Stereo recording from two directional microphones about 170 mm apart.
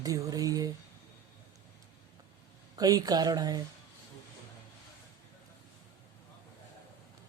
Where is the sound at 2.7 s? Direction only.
20° right (ahead or behind).